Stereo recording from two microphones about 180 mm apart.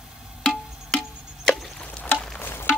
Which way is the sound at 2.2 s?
10° left (ahead or behind).